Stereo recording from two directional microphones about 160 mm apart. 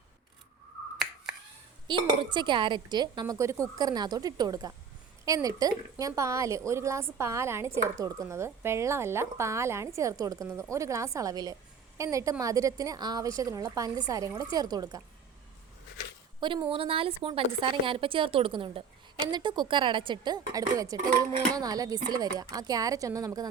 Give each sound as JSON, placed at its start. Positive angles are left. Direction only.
{"t": 1.9, "sound": "speech", "side_deg": -30}
{"t": 16.4, "sound": "a woman's voice", "side_deg": -30}